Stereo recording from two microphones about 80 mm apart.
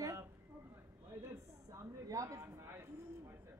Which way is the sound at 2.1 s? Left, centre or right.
Right.